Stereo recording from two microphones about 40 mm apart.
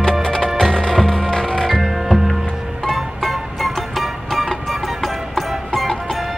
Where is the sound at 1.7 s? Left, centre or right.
Centre.